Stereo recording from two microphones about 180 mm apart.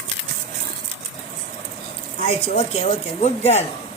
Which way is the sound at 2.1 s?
35° left (ahead or behind).